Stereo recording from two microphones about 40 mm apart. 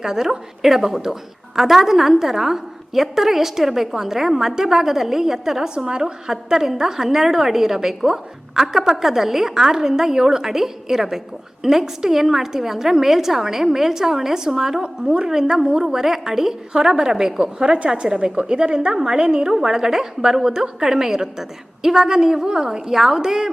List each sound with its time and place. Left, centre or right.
0.0 s a woman's voice: centre
23.0 s a woman's voice: centre